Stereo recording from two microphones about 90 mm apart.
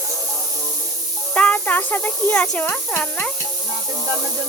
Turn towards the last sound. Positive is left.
turn(degrees=15)  # may be behind; listen again after turning